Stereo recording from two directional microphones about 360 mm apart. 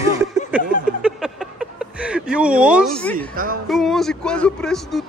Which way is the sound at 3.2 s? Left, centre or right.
Right.